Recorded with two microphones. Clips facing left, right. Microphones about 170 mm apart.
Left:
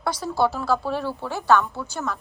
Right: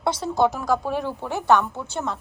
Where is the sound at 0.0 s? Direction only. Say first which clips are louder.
Right 2 dB; 25° right (ahead or behind).